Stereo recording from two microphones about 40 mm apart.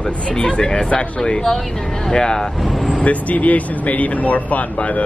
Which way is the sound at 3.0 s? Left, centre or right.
Left.